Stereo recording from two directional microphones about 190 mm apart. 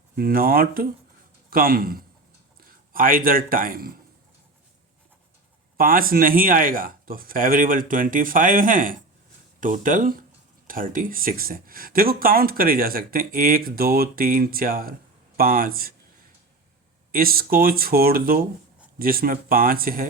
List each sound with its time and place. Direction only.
0.2 s a man's voice: 50° right (ahead or behind)
5.7 s speech: 50° right (ahead or behind)
17.1 s speech: 50° right (ahead or behind)